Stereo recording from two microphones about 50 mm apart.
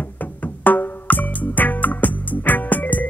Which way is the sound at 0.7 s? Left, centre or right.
Left.